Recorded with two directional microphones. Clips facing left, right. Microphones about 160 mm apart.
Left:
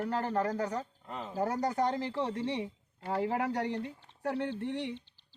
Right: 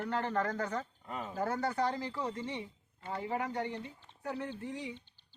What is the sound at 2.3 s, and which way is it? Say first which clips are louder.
Speech: left 6 dB; 75° left (ahead or behind).